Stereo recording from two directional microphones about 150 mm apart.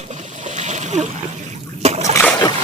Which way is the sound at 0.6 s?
50° right (ahead or behind).